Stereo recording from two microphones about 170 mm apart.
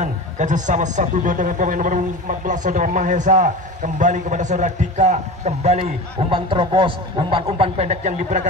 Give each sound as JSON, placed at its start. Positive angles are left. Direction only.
{"t": 0.0, "sound": "a man's voice", "side_deg": -45}